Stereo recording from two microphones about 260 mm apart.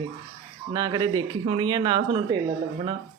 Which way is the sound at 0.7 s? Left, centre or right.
Centre.